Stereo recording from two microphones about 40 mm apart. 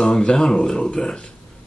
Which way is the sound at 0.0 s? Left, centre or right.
Centre.